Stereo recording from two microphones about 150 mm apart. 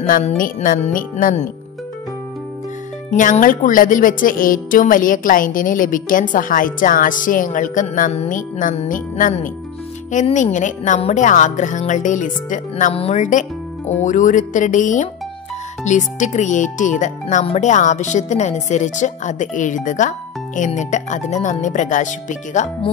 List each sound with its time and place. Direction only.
0.4 s speech: 60° left (ahead or behind)
3.1 s speech: 55° left (ahead or behind)
12.9 s speech: 45° left (ahead or behind)